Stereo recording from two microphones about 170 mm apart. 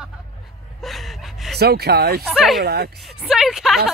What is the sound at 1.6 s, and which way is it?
Speech, 70° right (ahead or behind).